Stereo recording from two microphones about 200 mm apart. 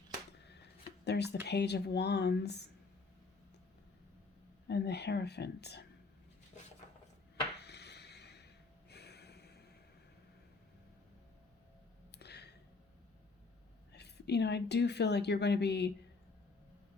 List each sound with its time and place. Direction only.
1.0 s a woman's voice: 55° left (ahead or behind)
4.7 s a woman's voice: 55° left (ahead or behind)
7.6 s a sound: 55° left (ahead or behind)
8.9 s snort: 55° left (ahead or behind)
12.1 s a sound: 55° left (ahead or behind)
13.9 s a woman's voice: 55° left (ahead or behind)